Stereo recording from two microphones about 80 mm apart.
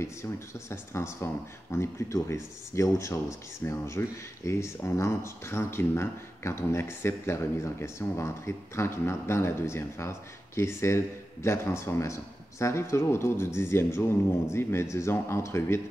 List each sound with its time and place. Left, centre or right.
0.0 s speech: left